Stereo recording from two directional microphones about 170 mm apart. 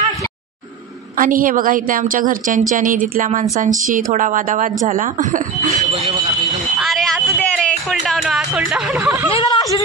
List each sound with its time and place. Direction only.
1.1 s speech: 55° right (ahead or behind)
6.8 s a sound: centre (ahead or behind)
8.0 s speech: centre (ahead or behind)
9.0 s speech: 15° right (ahead or behind)
9.3 s speech: 30° left (ahead or behind)